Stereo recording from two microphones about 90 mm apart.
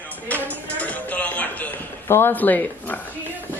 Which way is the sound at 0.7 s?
15° left (ahead or behind).